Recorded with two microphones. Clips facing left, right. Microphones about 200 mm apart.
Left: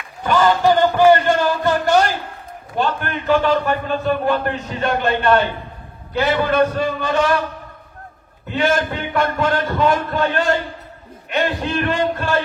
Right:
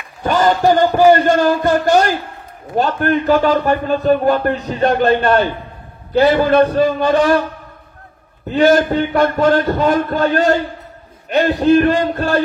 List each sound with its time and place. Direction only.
0.2 s a man's voice: 40° right (ahead or behind)
6.5 s a man's voice: 30° right (ahead or behind)
8.5 s a man's voice: 40° right (ahead or behind)